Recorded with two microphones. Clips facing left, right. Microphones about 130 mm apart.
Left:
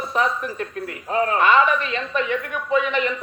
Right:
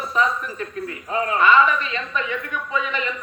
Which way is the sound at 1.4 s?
60° left (ahead or behind).